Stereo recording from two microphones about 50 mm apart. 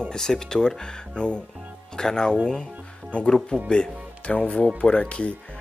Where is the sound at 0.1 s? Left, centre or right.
Centre.